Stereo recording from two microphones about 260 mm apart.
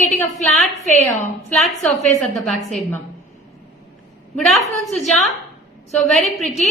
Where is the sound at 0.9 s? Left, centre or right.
Left.